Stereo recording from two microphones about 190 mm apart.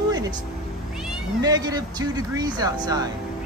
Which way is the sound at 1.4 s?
20° right (ahead or behind).